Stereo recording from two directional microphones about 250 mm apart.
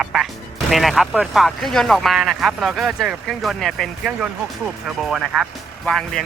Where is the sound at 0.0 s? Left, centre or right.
Centre.